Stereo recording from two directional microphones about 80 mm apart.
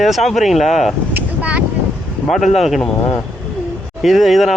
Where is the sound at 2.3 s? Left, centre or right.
Centre.